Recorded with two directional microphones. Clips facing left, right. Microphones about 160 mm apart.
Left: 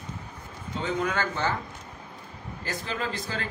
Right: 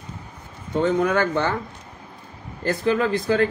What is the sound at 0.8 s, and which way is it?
Speech, 55° right (ahead or behind).